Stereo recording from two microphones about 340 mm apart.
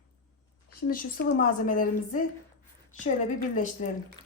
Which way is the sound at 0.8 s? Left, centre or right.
Left.